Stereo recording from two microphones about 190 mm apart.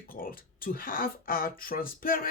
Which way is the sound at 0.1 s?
50° left (ahead or behind).